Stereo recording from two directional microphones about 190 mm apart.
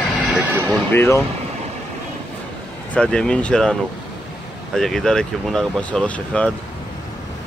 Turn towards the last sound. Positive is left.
turn(degrees=5)  # may be behind; listen again after turning